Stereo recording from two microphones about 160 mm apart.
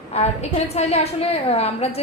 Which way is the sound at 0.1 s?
40° left (ahead or behind).